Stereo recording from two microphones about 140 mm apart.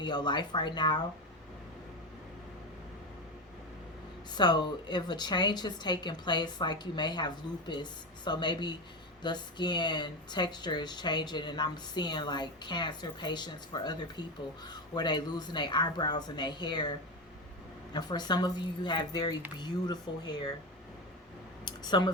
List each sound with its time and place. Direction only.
0.0 s speech: 30° left (ahead or behind)
4.4 s speech: 30° left (ahead or behind)
17.9 s speech: 30° left (ahead or behind)
21.6 s a sound: 30° left (ahead or behind)